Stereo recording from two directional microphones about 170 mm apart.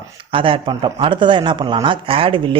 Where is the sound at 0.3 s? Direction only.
30° right (ahead or behind).